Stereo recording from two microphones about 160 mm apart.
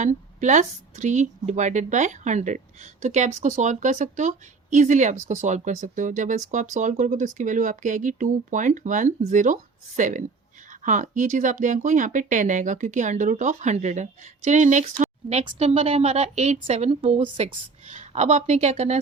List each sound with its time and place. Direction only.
0.0 s speech: 50° right (ahead or behind)